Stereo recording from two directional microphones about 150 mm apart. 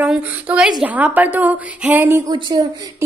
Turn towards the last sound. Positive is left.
turn(degrees=-25)  # may be behind; listen again after turning